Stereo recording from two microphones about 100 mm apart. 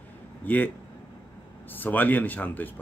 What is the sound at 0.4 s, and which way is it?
Speech, 20° left (ahead or behind).